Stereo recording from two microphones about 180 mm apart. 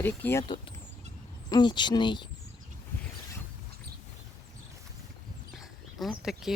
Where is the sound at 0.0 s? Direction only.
10° left (ahead or behind).